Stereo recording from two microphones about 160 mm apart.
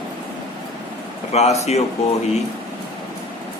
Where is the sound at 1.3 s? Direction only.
40° left (ahead or behind).